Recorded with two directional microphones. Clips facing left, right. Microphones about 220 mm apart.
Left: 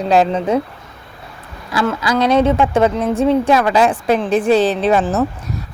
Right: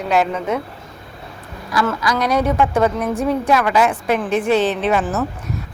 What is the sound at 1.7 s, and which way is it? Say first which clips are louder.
A woman's voice: left 2 dB; 25° left (ahead or behind).